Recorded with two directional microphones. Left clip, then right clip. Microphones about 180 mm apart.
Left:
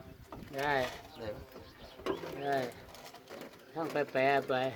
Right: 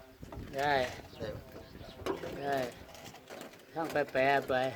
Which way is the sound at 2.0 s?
Centre (ahead or behind).